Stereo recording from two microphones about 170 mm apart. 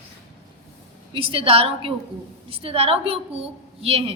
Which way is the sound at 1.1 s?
30° right (ahead or behind).